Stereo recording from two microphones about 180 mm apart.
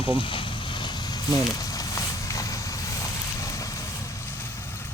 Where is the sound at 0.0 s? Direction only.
30° left (ahead or behind).